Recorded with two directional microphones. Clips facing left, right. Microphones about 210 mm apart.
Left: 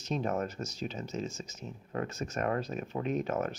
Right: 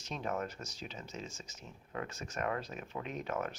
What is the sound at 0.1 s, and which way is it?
Speech, 40° left (ahead or behind).